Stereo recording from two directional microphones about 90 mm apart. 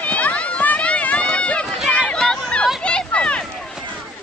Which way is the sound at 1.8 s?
10° left (ahead or behind).